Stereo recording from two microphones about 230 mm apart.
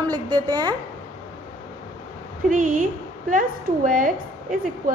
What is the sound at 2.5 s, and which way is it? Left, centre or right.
A woman's voice, right.